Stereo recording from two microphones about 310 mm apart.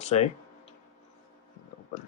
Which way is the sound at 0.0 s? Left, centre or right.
Left.